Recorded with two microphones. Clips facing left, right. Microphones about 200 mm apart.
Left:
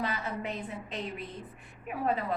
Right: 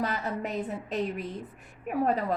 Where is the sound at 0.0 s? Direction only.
40° right (ahead or behind).